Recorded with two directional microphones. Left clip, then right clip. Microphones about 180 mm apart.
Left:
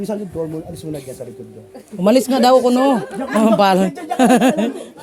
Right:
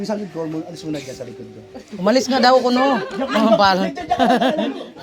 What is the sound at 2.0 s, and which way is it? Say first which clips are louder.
Speech: left 2 dB; 60° left (ahead or behind).